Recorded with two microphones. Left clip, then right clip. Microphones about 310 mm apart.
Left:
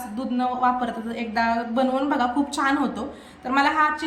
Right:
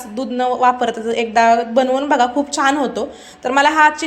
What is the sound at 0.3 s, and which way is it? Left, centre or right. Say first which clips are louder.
A woman's voice: right 7 dB; centre.